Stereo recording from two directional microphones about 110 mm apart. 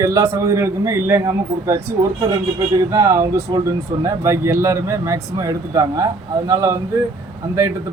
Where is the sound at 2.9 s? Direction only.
30° right (ahead or behind).